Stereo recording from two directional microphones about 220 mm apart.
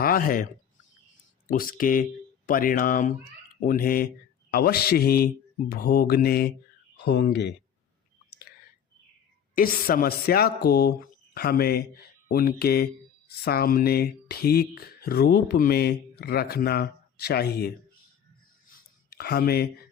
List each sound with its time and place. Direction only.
0.0 s speech: 40° left (ahead or behind)
1.5 s speech: 40° left (ahead or behind)
9.6 s speech: 40° left (ahead or behind)
18.7 s a sound: 45° left (ahead or behind)